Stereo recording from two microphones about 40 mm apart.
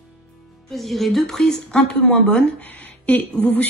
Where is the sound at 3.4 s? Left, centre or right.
Left.